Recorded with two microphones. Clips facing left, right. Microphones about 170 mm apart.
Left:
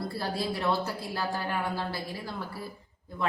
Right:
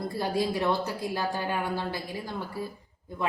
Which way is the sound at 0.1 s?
15° right (ahead or behind).